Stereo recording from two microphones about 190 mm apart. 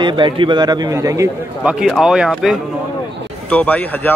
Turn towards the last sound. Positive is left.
turn(degrees=10)  # may be behind; listen again after turning